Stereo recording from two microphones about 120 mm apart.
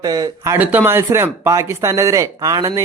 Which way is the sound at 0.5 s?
15° right (ahead or behind).